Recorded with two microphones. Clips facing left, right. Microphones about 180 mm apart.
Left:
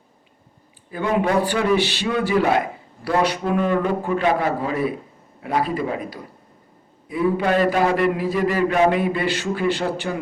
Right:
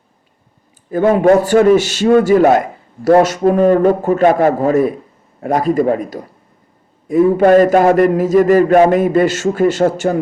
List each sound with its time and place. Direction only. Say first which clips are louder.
0.9 s a man's voice: right 11 dB; 45° right (ahead or behind)